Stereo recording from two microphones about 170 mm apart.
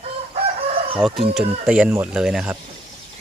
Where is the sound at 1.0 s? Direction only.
Centre (ahead or behind).